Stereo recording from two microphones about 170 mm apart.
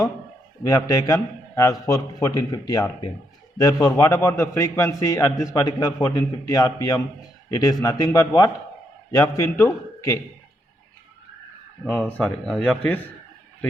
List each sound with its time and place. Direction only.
0.6 s a man's voice: 20° left (ahead or behind)
11.9 s speech: 10° left (ahead or behind)